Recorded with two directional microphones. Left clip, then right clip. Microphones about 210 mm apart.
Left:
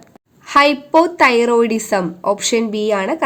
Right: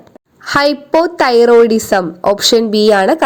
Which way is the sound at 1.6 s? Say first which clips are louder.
Right 7 dB; centre (ahead or behind).